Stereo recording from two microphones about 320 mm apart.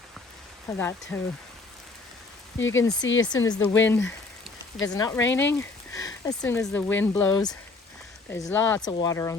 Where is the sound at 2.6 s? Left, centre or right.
Left.